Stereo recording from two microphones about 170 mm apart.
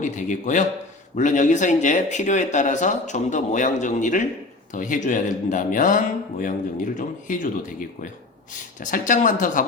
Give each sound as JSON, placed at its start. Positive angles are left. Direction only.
{"t": 0.0, "sound": "speech", "side_deg": 45}